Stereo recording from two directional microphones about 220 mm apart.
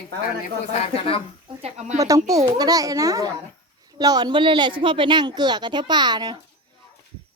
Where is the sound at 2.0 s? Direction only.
15° right (ahead or behind).